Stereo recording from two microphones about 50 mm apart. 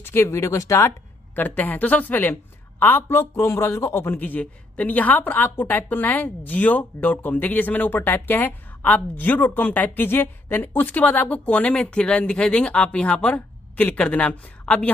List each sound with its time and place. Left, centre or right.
0.0 s speech: left
0.3 s speech: left
1.3 s a woman's voice: left
3.3 s a man's voice: left
4.2 s a woman's voice: left
11.7 s speech: left